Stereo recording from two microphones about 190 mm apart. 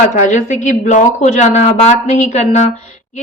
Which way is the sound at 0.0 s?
40° left (ahead or behind).